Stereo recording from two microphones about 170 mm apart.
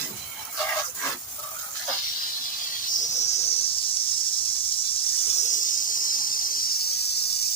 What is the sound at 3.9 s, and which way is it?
Snake, 30° left (ahead or behind).